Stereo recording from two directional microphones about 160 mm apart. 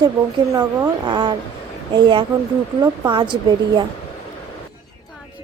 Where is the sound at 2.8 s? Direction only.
30° right (ahead or behind).